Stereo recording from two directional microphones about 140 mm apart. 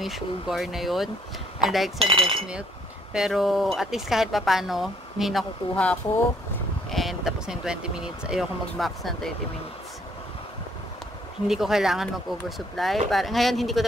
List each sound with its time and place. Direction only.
0.0 s speech: centre (ahead or behind)
2.0 s speech: 40° right (ahead or behind)
3.1 s speech: 5° right (ahead or behind)
11.4 s speech: 5° right (ahead or behind)